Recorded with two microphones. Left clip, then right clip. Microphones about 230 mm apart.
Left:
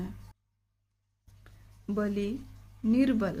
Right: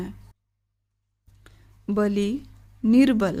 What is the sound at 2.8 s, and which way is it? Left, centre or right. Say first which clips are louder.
Speech: right 8 dB; right.